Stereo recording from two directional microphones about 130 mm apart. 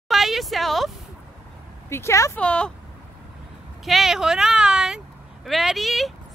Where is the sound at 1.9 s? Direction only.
20° left (ahead or behind).